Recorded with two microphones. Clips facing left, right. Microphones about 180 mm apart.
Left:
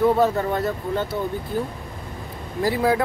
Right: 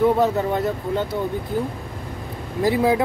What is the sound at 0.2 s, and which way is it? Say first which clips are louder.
Speech: right 1 dB; 20° right (ahead or behind).